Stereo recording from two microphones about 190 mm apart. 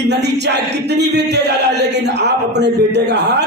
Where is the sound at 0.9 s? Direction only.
65° right (ahead or behind).